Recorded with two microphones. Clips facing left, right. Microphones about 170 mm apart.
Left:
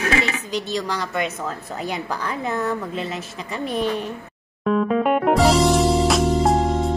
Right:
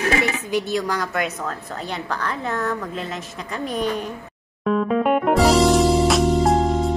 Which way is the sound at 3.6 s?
40° right (ahead or behind).